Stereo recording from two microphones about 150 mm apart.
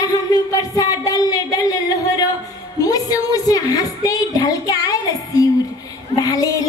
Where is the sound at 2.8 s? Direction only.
25° left (ahead or behind).